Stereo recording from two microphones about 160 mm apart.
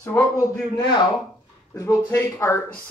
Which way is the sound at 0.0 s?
15° left (ahead or behind).